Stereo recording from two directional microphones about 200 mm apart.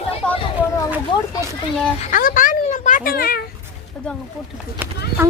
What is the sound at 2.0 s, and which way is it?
Speech, 45° left (ahead or behind).